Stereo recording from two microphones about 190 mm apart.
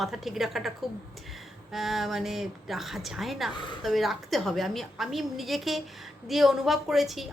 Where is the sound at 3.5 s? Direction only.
25° left (ahead or behind).